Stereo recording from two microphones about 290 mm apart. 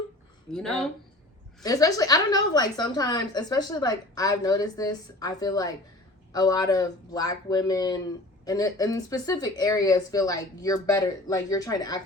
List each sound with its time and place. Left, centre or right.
0.5 s speech: centre
1.6 s a woman's voice: centre